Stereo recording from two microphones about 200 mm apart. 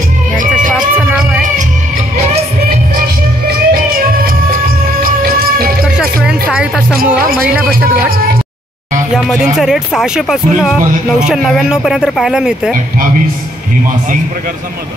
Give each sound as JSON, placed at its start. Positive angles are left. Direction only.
{"t": 0.4, "sound": "music", "side_deg": -40}
{"t": 0.7, "sound": "music", "side_deg": -5}
{"t": 3.4, "sound": "music", "side_deg": -45}
{"t": 5.9, "sound": "music", "side_deg": -5}
{"t": 9.1, "sound": "speech", "side_deg": 0}